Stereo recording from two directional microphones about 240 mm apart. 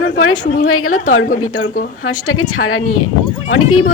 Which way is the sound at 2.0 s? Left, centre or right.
Left.